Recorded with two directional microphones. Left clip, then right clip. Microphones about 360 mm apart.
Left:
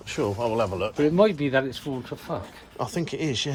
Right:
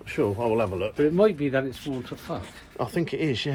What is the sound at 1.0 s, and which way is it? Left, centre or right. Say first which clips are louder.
Speech: left 1 dB; left.